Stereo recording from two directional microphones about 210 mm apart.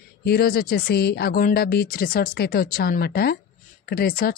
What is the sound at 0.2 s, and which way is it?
Speech, 45° left (ahead or behind).